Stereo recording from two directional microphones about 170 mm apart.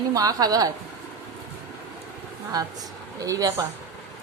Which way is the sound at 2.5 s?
20° right (ahead or behind).